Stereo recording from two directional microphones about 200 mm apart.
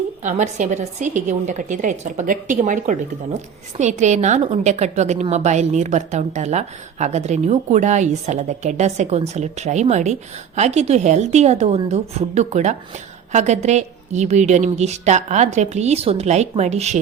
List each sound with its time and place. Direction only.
0.2 s a woman's voice: 35° right (ahead or behind)